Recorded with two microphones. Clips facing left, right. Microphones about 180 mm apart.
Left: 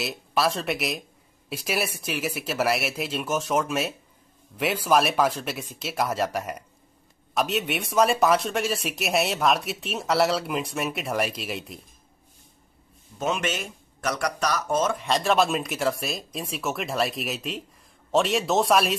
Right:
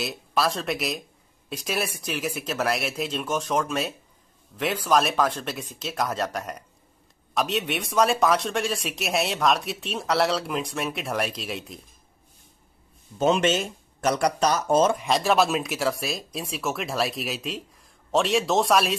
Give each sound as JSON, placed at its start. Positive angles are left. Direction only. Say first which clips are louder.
{"t": 0.0, "sound": "speech", "louder": "even", "side_deg": 0}
{"t": 13.2, "sound": "speech", "louder": "right 6 dB", "side_deg": -30}
{"t": 15.0, "sound": "speech", "louder": "right 1 dB", "side_deg": -5}